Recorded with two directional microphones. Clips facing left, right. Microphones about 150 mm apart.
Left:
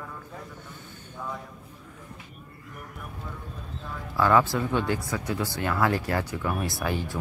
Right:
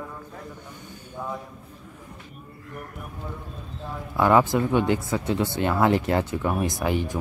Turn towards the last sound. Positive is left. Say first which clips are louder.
# right 4 dB
turn(degrees=-20)  # may be behind; listen again after turning